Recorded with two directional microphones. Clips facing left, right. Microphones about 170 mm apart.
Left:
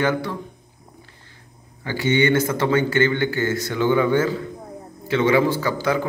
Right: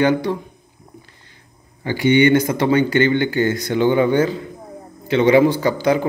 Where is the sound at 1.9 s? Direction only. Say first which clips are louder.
Right 5 dB; 15° right (ahead or behind).